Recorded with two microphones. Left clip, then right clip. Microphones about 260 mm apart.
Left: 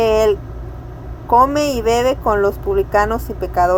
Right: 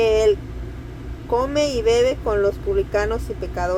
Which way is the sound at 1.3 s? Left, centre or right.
Left.